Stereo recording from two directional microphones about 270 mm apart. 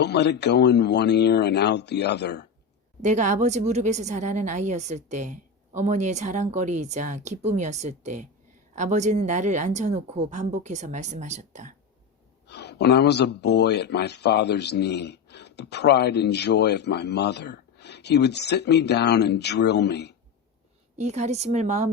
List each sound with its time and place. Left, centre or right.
0.0 s speech: left
3.0 s speech: right
12.5 s speech: left
21.0 s speech: right